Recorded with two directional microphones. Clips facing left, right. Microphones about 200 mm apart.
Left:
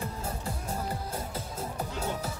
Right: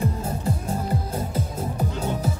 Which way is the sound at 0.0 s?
20° right (ahead or behind).